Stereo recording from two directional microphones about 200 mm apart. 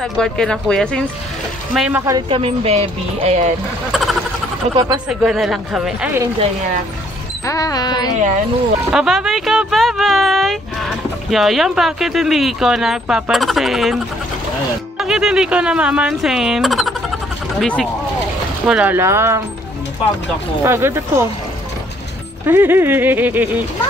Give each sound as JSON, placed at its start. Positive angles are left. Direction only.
{"t": 0.0, "sound": "speech", "side_deg": 5}
{"t": 3.9, "sound": "vehicle", "side_deg": 0}
{"t": 4.7, "sound": "speech", "side_deg": -20}
{"t": 5.0, "sound": "speech", "side_deg": 0}
{"t": 7.4, "sound": "speech", "side_deg": 15}
{"t": 8.9, "sound": "speech", "side_deg": 0}
{"t": 18.7, "sound": "speech", "side_deg": -5}
{"t": 20.6, "sound": "speech", "side_deg": -10}
{"t": 22.5, "sound": "speech", "side_deg": -10}